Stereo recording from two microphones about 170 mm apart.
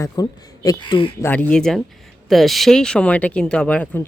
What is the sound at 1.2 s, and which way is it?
Speech, 10° left (ahead or behind).